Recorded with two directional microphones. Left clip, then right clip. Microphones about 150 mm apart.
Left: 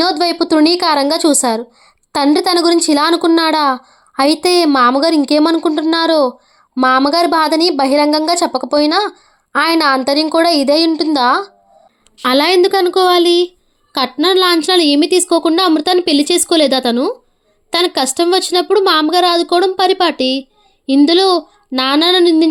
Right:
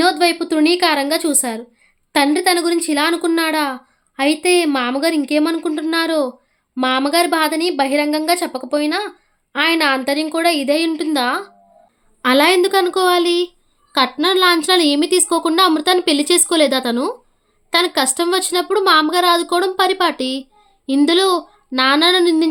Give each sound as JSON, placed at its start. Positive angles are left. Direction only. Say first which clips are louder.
{"t": 0.0, "sound": "speech", "louder": "left 1 dB", "side_deg": 25}